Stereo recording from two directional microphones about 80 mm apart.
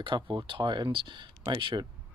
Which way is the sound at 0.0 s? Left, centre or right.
Right.